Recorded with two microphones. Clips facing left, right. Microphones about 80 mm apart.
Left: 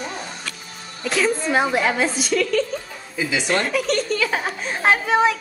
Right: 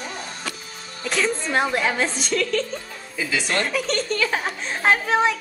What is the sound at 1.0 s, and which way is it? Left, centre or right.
A woman's voice, centre.